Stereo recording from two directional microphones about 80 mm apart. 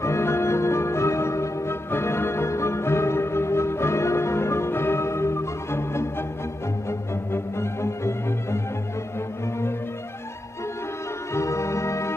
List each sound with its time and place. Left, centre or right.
0.0 s music: left
11.3 s music: left